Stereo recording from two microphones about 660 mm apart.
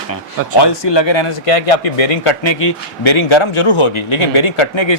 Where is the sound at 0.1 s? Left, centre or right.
Left.